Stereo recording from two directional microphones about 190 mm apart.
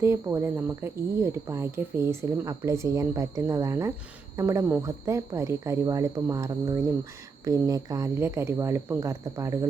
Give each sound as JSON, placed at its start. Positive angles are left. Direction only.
{"t": 0.0, "sound": "speech", "side_deg": -15}